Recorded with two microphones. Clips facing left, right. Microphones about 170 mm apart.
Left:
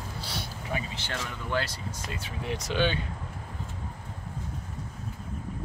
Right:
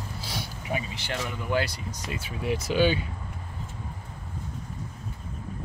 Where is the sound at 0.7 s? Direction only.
15° right (ahead or behind).